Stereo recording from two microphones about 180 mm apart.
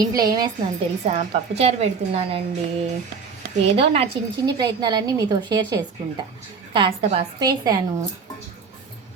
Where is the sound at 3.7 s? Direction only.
30° right (ahead or behind).